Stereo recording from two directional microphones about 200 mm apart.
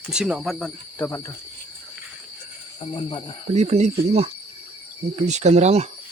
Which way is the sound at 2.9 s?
25° left (ahead or behind).